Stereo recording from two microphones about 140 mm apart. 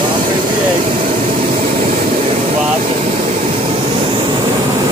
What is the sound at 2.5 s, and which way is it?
Vehicle, 50° right (ahead or behind).